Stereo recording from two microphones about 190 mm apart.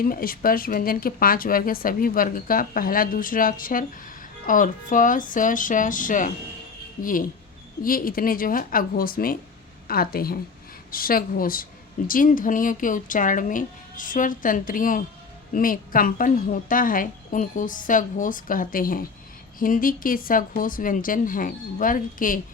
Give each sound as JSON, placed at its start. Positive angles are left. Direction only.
{"t": 0.0, "sound": "speech", "side_deg": 50}